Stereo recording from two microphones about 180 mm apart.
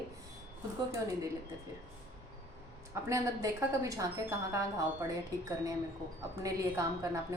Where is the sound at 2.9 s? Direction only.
15° right (ahead or behind).